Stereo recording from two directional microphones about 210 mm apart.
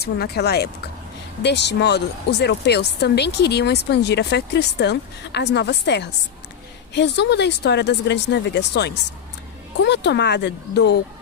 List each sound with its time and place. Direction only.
0.0 s speech: 50° left (ahead or behind)